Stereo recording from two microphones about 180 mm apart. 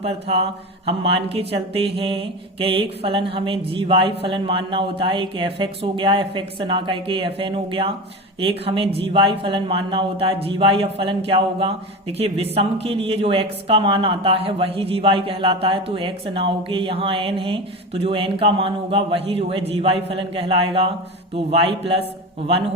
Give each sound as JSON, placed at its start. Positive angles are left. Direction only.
{"t": 0.9, "sound": "speech", "side_deg": -30}
{"t": 2.0, "sound": "mantra", "side_deg": -30}
{"t": 8.4, "sound": "speech", "side_deg": -30}